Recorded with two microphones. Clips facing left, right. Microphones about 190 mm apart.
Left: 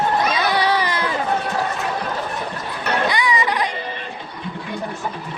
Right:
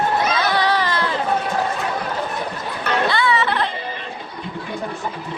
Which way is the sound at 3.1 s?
15° left (ahead or behind).